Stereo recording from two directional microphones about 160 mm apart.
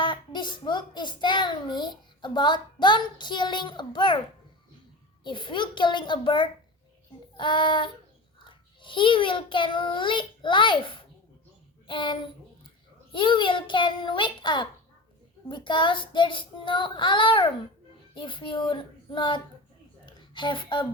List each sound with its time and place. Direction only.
0.0 s a child's voice: 30° left (ahead or behind)
5.2 s a child's voice: 30° left (ahead or behind)
7.3 s child singing: 30° left (ahead or behind)
8.4 s a child's voice: 30° left (ahead or behind)
11.9 s child singing: 30° left (ahead or behind)
13.1 s a child's voice: 30° left (ahead or behind)
15.4 s child singing: 30° left (ahead or behind)
20.1 s speech: 30° left (ahead or behind)